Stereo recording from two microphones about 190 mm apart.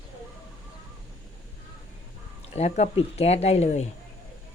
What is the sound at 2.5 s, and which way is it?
Speech, 35° left (ahead or behind).